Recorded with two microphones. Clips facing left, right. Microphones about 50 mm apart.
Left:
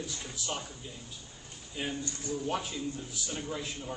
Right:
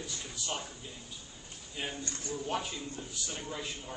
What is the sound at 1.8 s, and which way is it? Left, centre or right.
A man's voice, centre.